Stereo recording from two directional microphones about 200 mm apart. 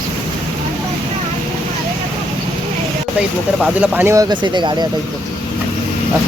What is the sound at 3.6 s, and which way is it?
Speech, 10° right (ahead or behind).